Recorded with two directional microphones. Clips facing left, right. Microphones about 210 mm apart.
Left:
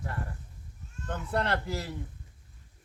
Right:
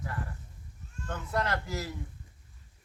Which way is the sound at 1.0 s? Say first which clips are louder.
Left 2 dB; 30° left (ahead or behind).